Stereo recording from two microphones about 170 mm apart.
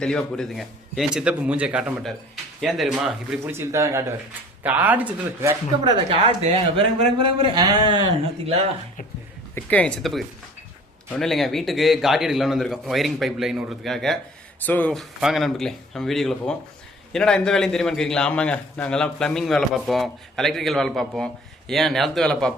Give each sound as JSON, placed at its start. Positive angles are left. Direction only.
{"t": 0.0, "sound": "a man's voice", "side_deg": 5}
{"t": 3.5, "sound": "speech", "side_deg": -15}
{"t": 6.1, "sound": "speech", "side_deg": -35}
{"t": 9.6, "sound": "a man's voice", "side_deg": 10}